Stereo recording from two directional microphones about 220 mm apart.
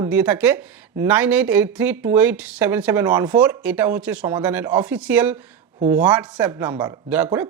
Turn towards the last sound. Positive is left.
turn(degrees=-10)  # may be behind; listen again after turning